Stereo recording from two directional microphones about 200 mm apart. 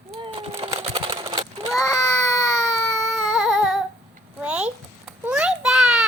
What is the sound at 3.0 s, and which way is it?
Singing, centre (ahead or behind).